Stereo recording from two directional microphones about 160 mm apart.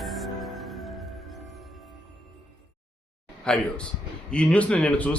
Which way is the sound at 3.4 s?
5° left (ahead or behind).